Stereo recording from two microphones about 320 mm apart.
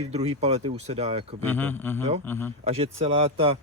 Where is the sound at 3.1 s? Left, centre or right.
Centre.